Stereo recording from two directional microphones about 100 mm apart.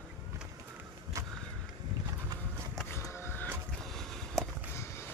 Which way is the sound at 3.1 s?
25° left (ahead or behind).